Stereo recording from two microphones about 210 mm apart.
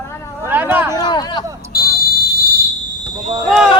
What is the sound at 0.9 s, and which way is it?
Speech, 20° left (ahead or behind).